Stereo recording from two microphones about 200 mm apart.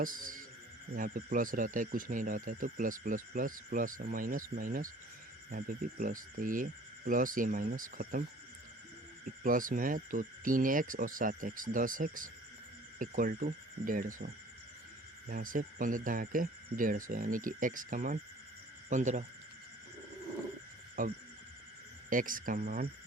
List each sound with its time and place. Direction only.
0.0 s a man's voice: 45° right (ahead or behind)
9.4 s speech: 40° right (ahead or behind)
15.3 s speech: 45° right (ahead or behind)
21.0 s speech: 45° right (ahead or behind)